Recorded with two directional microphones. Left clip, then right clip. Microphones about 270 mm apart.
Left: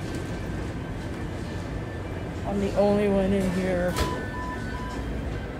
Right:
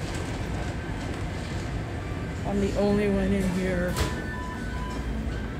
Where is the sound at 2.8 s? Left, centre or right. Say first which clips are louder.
Left 5 dB; centre.